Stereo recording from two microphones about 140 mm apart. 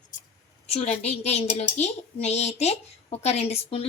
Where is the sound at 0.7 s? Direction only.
50° left (ahead or behind).